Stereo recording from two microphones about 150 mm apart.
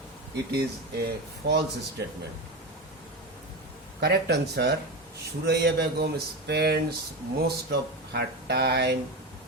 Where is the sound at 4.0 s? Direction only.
90° right.